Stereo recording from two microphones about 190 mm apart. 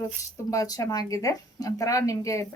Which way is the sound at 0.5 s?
20° left (ahead or behind).